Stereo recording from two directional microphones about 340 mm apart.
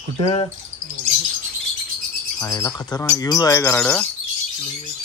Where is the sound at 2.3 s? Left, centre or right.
Centre.